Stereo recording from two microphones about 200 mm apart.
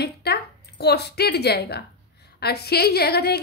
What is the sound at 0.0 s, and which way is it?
A woman's voice, 55° left (ahead or behind).